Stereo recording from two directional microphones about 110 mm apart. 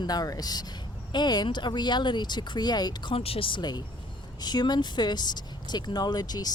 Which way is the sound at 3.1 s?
60° left (ahead or behind).